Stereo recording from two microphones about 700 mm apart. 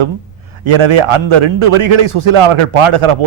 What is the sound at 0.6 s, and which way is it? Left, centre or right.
A man's voice, right.